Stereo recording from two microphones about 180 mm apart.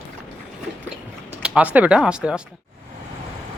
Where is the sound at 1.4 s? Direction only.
5° right (ahead or behind).